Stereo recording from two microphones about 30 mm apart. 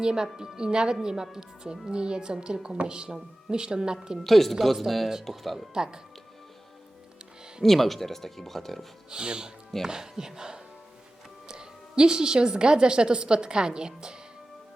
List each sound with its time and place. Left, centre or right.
0.0 s a woman's voice: right
4.2 s a woman's voice: centre
5.7 s a woman's voice: right
7.6 s speech: centre
9.0 s a woman's voice: right
9.8 s a woman's voice: centre